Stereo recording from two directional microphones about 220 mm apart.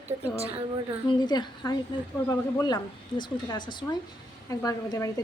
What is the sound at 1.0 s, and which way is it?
A woman's voice, 20° left (ahead or behind).